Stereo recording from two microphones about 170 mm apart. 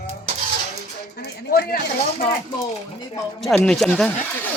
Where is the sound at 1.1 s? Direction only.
70° left (ahead or behind).